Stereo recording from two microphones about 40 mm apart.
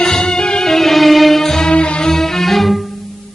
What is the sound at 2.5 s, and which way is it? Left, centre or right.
Music, centre.